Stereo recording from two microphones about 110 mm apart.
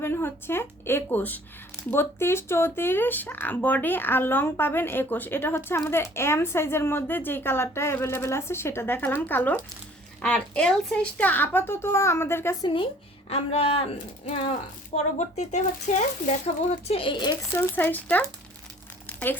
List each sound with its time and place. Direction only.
0.0 s a woman's voice: 20° left (ahead or behind)
12.6 s speech: 55° left (ahead or behind)
14.9 s speech: 90° left
16.9 s speech: 50° left (ahead or behind)
17.5 s speech: 15° left (ahead or behind)
19.0 s crumpling: 15° left (ahead or behind)